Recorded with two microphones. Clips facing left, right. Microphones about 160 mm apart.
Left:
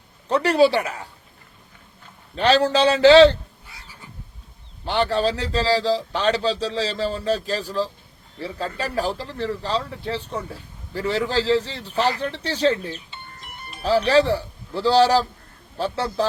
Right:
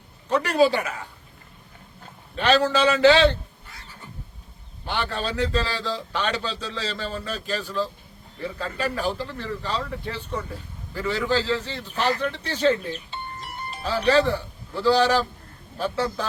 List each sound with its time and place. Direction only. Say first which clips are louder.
0.3 s speech: left 3 dB; 35° left (ahead or behind)
2.3 s speech: left 2 dB; 35° left (ahead or behind)
4.9 s speech: left 7 dB; 35° left (ahead or behind)
13.1 s music: right 6 dB; 35° right (ahead or behind)
14.1 s speech: right 3 dB; 35° left (ahead or behind)